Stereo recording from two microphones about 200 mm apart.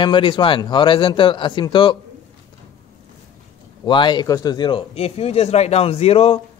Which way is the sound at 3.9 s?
25° left (ahead or behind).